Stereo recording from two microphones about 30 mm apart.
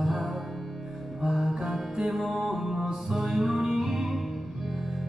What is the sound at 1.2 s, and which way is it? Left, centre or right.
Music, centre.